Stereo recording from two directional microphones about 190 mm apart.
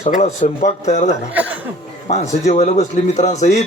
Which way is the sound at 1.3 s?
5° right (ahead or behind).